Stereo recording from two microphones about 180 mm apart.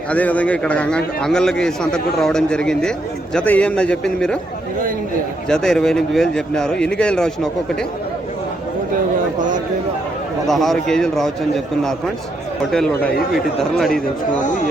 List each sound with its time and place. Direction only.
0.1 s a man's voice: 10° left (ahead or behind)
5.5 s a man's voice: 5° left (ahead or behind)
10.4 s a man's voice: centre (ahead or behind)